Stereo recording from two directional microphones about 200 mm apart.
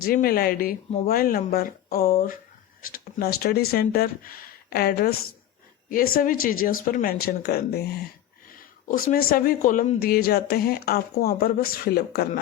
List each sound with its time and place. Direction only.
0.0 s speech: 45° left (ahead or behind)
9.0 s speech: 45° left (ahead or behind)